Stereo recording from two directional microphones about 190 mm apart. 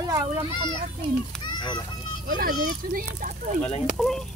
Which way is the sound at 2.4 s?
50° right (ahead or behind).